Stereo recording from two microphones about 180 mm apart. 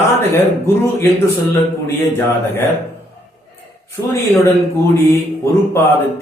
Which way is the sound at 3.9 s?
15° left (ahead or behind).